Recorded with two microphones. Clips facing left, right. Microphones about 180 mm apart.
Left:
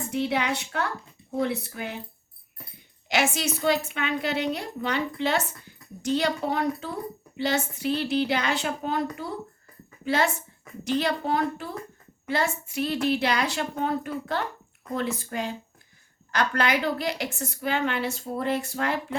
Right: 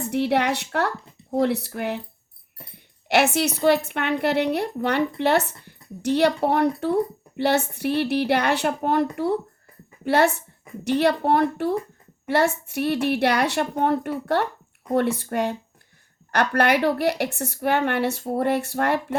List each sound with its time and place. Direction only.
0.1 s speech: 65° right (ahead or behind)